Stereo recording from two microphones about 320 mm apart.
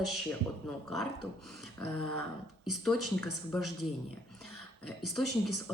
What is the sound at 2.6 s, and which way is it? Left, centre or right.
A woman's voice, centre.